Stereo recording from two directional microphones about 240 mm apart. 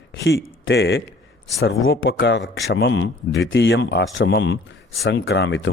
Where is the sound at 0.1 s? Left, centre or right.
Left.